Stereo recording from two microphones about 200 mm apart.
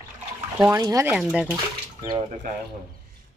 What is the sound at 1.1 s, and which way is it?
Speech, centre (ahead or behind).